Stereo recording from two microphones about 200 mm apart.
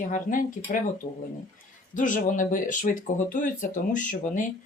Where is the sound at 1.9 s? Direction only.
40° left (ahead or behind).